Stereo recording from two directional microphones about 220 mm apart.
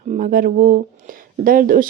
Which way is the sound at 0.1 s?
40° right (ahead or behind).